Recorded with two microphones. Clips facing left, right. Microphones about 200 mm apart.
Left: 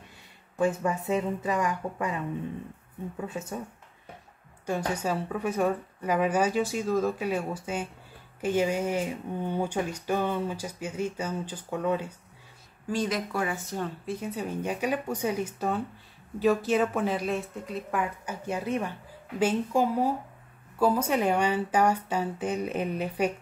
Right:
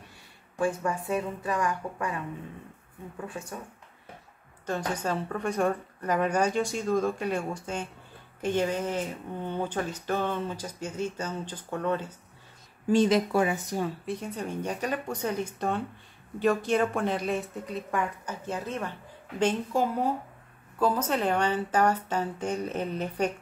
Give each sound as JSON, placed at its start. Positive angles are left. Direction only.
{"t": 0.6, "sound": "a woman's voice", "side_deg": 20}
{"t": 3.3, "sound": "a woman's voice", "side_deg": 20}
{"t": 4.6, "sound": "a woman's voice", "side_deg": 10}
{"t": 12.9, "sound": "speech", "side_deg": -25}
{"t": 13.7, "sound": "a woman's voice", "side_deg": -10}
{"t": 14.0, "sound": "a woman's voice", "side_deg": 5}